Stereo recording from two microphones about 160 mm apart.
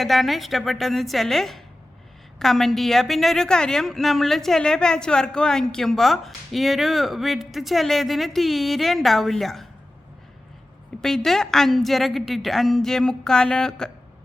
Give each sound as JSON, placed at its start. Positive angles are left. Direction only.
{"t": 0.0, "sound": "a woman's voice", "side_deg": 0}
{"t": 11.0, "sound": "a woman's voice", "side_deg": 5}